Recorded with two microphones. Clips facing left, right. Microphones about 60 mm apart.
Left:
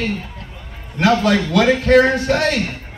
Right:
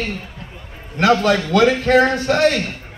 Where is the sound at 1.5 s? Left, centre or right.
Right.